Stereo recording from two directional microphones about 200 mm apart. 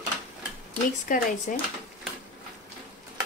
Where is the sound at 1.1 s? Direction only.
40° left (ahead or behind).